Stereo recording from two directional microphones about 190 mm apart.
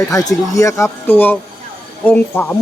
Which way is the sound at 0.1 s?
20° left (ahead or behind).